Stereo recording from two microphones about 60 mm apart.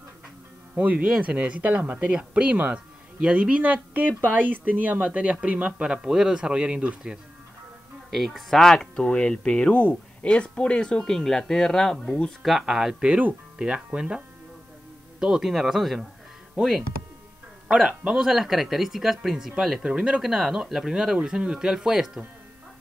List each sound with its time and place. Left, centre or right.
0.7 s speech: right
2.5 s speech: right
3.2 s speech: centre
6.0 s speech: centre
8.1 s speech: centre
12.4 s speech: centre
17.7 s speech: centre
20.2 s speech: centre